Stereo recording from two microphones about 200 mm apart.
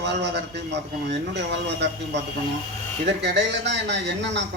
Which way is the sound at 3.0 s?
60° right (ahead or behind).